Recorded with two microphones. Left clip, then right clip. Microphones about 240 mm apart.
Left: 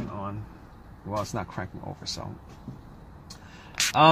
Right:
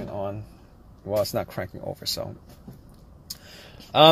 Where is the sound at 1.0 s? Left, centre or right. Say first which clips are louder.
Right 6 dB; centre.